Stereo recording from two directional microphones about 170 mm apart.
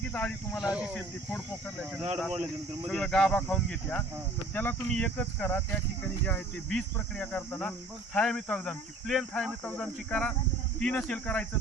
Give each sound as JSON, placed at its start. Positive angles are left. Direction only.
{"t": 0.1, "sound": "speech", "side_deg": 10}
{"t": 0.6, "sound": "speech", "side_deg": -5}
{"t": 0.9, "sound": "speech", "side_deg": 5}